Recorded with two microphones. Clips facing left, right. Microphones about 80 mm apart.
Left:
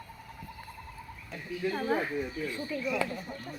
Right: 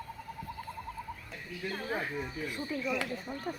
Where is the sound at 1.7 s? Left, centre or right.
Centre.